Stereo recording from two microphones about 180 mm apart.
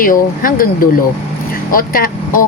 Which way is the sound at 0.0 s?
50° left (ahead or behind).